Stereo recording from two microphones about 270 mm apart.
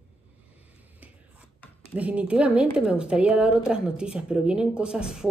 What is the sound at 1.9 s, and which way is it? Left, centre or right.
A woman's voice, centre.